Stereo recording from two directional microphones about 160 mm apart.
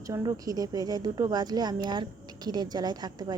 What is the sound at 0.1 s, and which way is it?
A woman's voice, 20° right (ahead or behind).